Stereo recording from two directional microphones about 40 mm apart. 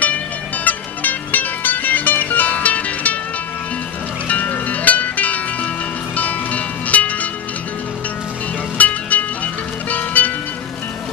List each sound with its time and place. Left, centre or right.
0.7 s music: left
4.3 s music: left
8.7 s music: left